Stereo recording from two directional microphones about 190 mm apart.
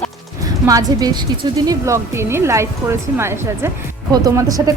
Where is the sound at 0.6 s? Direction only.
20° right (ahead or behind).